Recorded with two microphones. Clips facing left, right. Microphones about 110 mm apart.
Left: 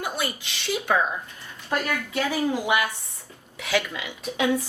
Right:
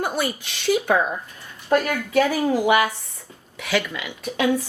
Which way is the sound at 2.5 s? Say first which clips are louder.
Right 6 dB; 60° right (ahead or behind).